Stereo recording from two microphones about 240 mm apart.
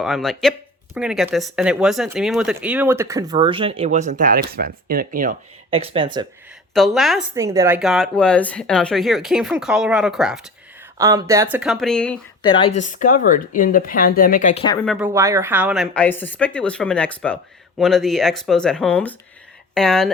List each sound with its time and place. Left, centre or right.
0.0 s speech: centre; by 5.4 s right
5.7 s speech: right
6.7 s speech: centre
7.3 s speech: centre
7.8 s speech: centre
10.9 s speech: centre
12.4 s speech: centre
14.8 s speech: centre